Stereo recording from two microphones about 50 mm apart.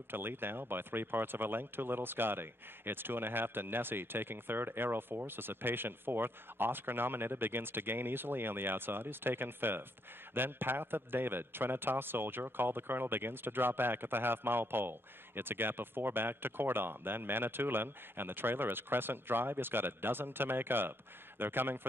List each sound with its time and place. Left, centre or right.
0.1 s a man's voice: right